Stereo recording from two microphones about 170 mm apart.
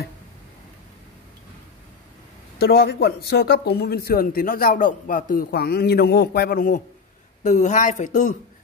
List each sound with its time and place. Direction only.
2.6 s speech: 65° left (ahead or behind); by 8.4 s 45° left (ahead or behind)